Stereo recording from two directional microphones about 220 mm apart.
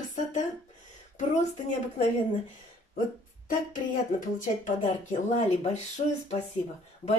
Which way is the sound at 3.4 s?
35° left (ahead or behind).